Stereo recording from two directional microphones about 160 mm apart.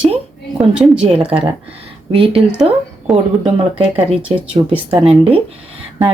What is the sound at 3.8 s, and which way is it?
Speech, 35° right (ahead or behind).